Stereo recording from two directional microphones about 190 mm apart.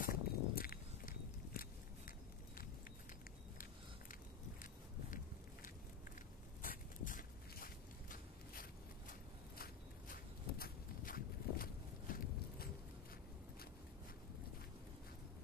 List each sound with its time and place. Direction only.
0.0 s biting: 50° left (ahead or behind)
6.6 s a sound: 45° left (ahead or behind)
9.6 s walk: 50° left (ahead or behind)